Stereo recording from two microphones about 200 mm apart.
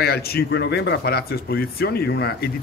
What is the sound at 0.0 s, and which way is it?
Speech, 50° left (ahead or behind).